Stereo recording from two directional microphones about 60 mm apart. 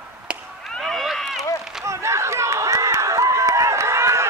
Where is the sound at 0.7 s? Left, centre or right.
Centre.